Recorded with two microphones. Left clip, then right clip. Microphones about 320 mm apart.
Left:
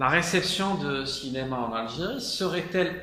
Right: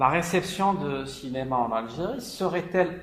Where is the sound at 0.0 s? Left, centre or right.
Centre.